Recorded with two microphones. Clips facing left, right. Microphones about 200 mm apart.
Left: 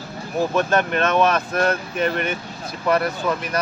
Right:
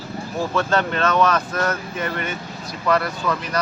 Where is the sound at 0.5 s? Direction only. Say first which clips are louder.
Even; 20° left (ahead or behind).